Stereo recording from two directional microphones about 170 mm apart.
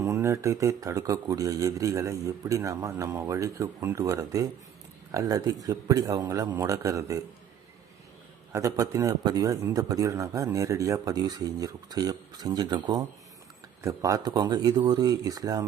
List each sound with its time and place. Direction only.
0.0 s a man's voice: 15° right (ahead or behind)
8.5 s a man's voice: 20° right (ahead or behind)